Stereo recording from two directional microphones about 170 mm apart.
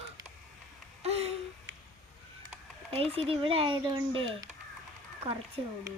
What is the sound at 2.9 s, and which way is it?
Speech, 35° right (ahead or behind).